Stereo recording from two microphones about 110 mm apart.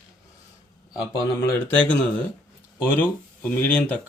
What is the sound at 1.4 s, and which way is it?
Speech, 15° left (ahead or behind).